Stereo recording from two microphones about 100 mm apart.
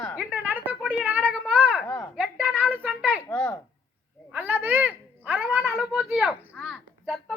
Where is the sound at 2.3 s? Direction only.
15° right (ahead or behind).